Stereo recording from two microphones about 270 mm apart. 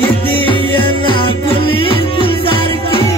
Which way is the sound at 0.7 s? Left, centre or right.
Centre.